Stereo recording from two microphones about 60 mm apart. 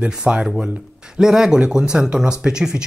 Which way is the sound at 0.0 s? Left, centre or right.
Centre.